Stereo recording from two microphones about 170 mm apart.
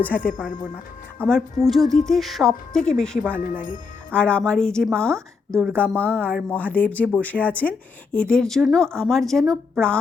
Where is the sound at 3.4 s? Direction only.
50° left (ahead or behind).